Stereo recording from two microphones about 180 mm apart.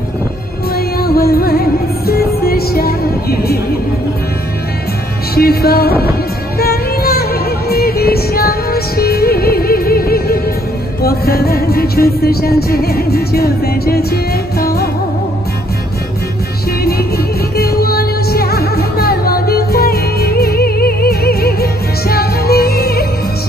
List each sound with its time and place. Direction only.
0.7 s music: 60° left (ahead or behind)
5.3 s music: 60° left (ahead or behind)
17.6 s music: 60° left (ahead or behind)